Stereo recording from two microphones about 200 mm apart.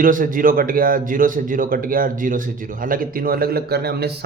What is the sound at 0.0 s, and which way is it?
Speech, 45° right (ahead or behind).